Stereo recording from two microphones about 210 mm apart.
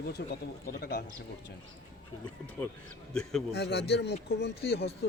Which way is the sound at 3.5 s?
50° left (ahead or behind).